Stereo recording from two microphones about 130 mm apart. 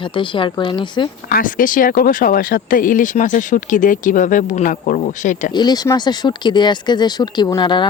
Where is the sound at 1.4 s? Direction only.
90° left.